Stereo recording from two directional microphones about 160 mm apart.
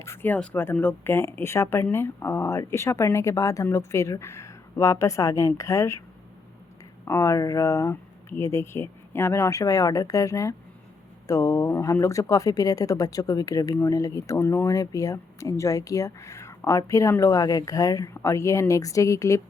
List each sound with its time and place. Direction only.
0.0 s speech: 15° left (ahead or behind)
7.0 s speech: 20° left (ahead or behind)